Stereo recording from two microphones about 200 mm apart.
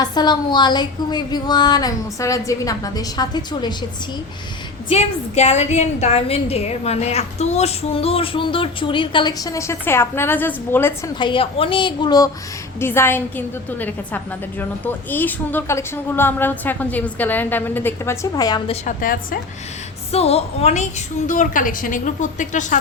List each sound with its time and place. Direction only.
0.0 s a woman's voice: 20° left (ahead or behind)
4.9 s a woman's voice: 30° left (ahead or behind); by 11.1 s 10° left (ahead or behind)
11.2 s a woman's voice: 25° left (ahead or behind)
18.7 s a woman's voice: 40° left (ahead or behind)
20.1 s a woman's voice: 30° left (ahead or behind)